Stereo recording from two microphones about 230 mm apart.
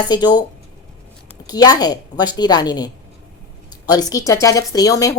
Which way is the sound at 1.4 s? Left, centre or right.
Centre.